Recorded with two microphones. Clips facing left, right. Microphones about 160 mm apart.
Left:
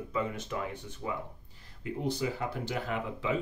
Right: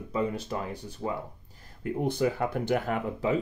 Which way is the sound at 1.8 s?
55° right (ahead or behind).